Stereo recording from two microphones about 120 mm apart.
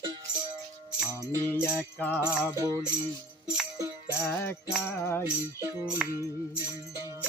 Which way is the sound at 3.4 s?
5° right (ahead or behind).